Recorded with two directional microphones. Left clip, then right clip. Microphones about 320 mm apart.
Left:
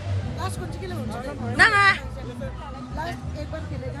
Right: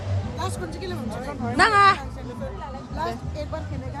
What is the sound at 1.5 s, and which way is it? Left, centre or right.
Speech, centre.